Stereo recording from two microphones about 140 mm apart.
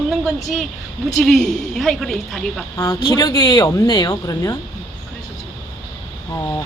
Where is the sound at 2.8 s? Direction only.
25° left (ahead or behind).